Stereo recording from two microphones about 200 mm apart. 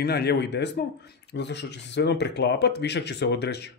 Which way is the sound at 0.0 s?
55° left (ahead or behind).